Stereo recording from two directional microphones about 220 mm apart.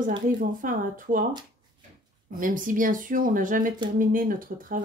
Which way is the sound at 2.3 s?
40° right (ahead or behind).